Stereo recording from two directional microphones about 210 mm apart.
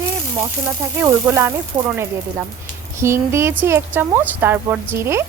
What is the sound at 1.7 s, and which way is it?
Speech, 30° right (ahead or behind).